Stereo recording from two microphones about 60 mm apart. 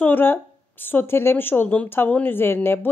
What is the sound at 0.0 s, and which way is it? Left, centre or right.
Speech, left.